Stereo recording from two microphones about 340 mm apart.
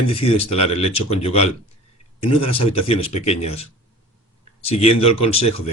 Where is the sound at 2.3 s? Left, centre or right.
Centre.